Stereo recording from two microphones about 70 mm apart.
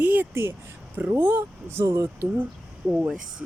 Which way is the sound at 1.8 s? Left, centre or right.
Right.